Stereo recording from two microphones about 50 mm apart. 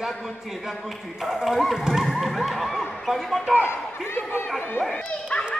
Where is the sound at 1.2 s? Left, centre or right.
Centre.